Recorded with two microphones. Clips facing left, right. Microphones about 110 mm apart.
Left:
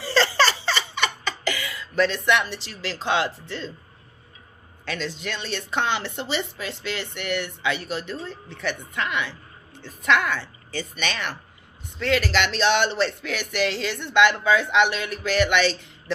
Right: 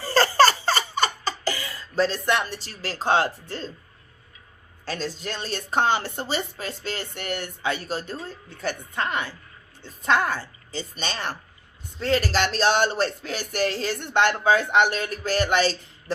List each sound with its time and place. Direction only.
0.0 s laughter: 45° right (ahead or behind)
4.9 s speech: 40° right (ahead or behind)